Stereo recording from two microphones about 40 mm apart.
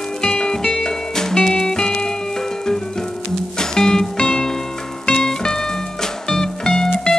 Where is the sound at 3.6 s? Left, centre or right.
Centre.